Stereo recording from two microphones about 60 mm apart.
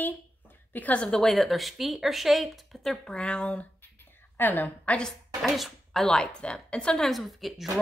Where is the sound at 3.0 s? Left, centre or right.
Centre.